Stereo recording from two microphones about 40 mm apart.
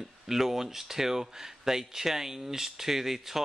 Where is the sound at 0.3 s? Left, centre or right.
Centre.